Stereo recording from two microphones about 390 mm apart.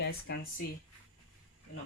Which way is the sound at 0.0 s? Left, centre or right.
Left.